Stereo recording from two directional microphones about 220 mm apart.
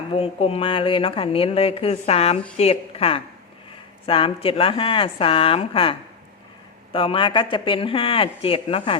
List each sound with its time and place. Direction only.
0.1 s speech: 25° left (ahead or behind)